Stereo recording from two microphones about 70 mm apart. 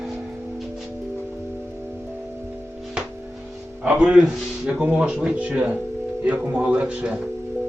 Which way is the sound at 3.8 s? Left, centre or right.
Centre.